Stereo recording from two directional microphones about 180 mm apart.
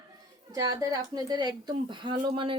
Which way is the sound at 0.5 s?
20° right (ahead or behind).